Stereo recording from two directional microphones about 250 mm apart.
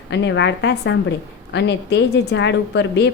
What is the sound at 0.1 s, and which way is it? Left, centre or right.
A woman's voice, left.